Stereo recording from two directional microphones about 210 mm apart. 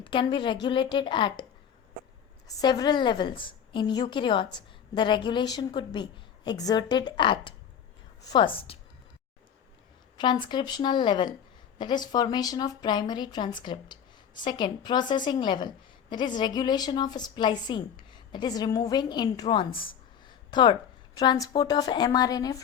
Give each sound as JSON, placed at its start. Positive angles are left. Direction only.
{"t": 0.0, "sound": "speech", "side_deg": 25}
{"t": 2.5, "sound": "speech", "side_deg": 20}
{"t": 10.2, "sound": "a woman's voice", "side_deg": 20}